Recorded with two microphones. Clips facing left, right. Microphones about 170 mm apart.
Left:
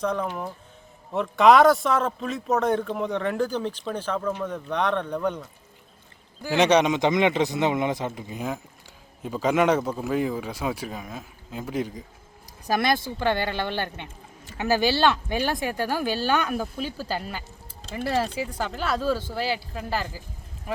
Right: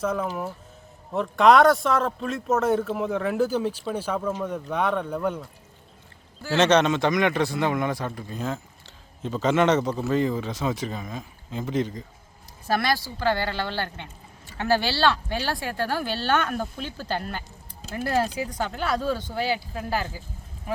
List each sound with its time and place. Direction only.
0.0 s speech: 5° right (ahead or behind)
6.4 s speech: 15° left (ahead or behind)